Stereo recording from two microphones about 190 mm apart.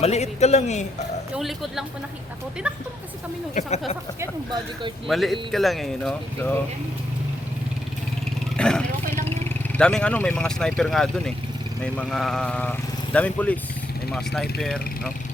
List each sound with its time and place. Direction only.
0.0 s a man's voice: 35° left (ahead or behind)
1.4 s speech: centre (ahead or behind)
3.5 s a man's voice: 35° left (ahead or behind)
5.0 s speech: centre (ahead or behind)
8.5 s vehicle: 5° left (ahead or behind)
9.7 s speech: 5° left (ahead or behind)